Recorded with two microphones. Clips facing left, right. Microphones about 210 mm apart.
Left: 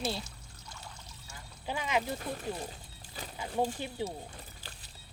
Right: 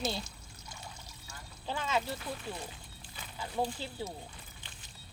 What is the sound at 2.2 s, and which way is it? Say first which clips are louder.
Speech: left 3 dB; 40° left (ahead or behind).